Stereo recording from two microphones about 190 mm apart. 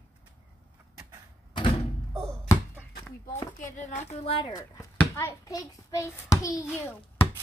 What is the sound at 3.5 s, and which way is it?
A child's voice, 40° left (ahead or behind).